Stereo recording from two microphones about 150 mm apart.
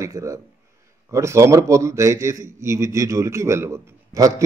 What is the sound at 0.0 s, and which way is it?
A man's voice, 20° right (ahead or behind).